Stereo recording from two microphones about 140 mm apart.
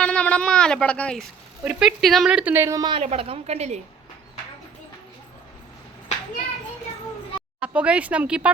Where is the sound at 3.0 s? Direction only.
45° right (ahead or behind).